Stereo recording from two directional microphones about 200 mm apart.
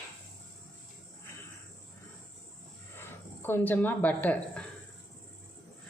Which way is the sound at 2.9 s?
10° left (ahead or behind).